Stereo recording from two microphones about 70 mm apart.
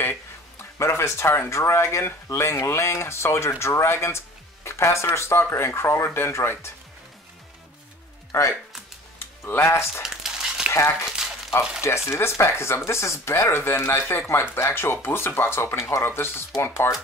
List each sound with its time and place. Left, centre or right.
0.7 s speech: left
8.3 s speech: left
9.2 s speech: left
10.0 s crumpling: centre
10.7 s speech: left